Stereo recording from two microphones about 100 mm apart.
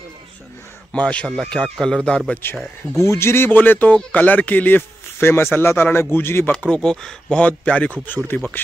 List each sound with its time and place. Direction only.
0.9 s speech: 10° left (ahead or behind)
3.0 s speech: 25° left (ahead or behind)
6.5 s speech: 10° left (ahead or behind)